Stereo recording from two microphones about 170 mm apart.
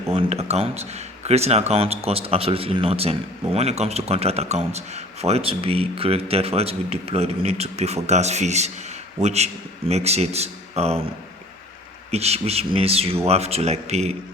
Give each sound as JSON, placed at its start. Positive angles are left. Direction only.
{"t": 0.1, "sound": "speech", "side_deg": -35}
{"t": 12.1, "sound": "speech", "side_deg": -40}